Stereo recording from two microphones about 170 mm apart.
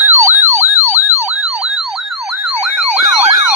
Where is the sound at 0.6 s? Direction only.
15° right (ahead or behind).